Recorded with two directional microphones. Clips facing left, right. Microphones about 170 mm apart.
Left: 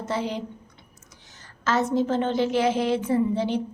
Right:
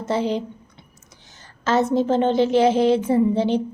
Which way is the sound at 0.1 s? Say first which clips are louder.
Right 6 dB; 25° right (ahead or behind).